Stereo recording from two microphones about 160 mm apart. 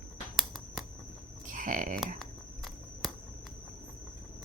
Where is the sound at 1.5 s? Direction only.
55° right (ahead or behind).